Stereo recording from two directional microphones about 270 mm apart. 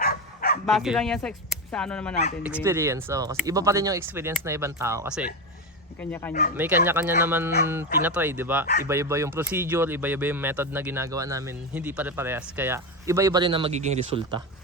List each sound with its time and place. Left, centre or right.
0.0 s bow-wow: left
0.6 s speech: centre
2.6 s speech: centre
6.0 s speech: centre
6.6 s speech: centre